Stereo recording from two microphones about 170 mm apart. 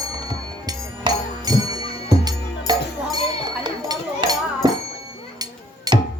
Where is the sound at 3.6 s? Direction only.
25° right (ahead or behind).